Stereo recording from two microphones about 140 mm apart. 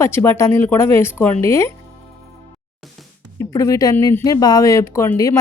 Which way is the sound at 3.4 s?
25° left (ahead or behind).